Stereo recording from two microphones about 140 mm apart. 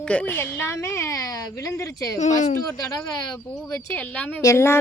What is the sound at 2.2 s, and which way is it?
Speech, 60° left (ahead or behind).